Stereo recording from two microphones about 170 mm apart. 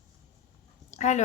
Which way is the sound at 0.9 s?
45° left (ahead or behind).